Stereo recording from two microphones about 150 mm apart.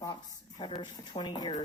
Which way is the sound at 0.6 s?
30° left (ahead or behind).